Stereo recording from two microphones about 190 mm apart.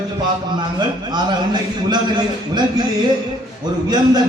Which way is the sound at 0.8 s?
25° right (ahead or behind).